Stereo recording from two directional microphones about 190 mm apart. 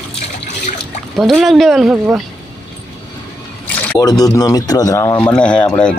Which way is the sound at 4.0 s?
20° left (ahead or behind).